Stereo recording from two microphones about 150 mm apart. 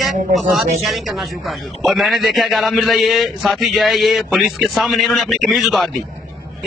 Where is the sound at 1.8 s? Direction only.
Centre (ahead or behind).